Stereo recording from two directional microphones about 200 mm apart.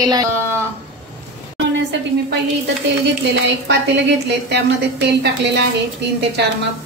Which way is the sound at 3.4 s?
60° right (ahead or behind).